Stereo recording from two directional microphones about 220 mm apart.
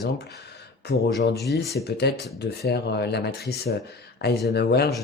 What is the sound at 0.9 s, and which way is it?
Speech, 50° left (ahead or behind).